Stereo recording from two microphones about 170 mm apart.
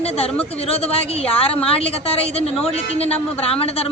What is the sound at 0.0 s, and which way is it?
A man's voice, 35° left (ahead or behind).